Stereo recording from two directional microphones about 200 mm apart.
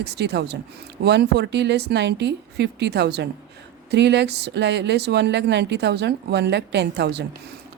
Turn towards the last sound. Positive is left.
turn(degrees=-55)  # may be behind; listen again after turning